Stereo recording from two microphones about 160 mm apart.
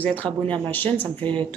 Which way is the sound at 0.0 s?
10° left (ahead or behind).